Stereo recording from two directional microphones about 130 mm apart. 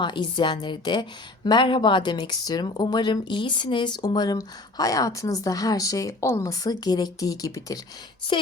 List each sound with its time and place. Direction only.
0.0 s speech: 35° left (ahead or behind)
8.3 s speech: 40° left (ahead or behind)